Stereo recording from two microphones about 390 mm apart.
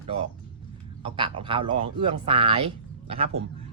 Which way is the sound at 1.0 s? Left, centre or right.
Centre.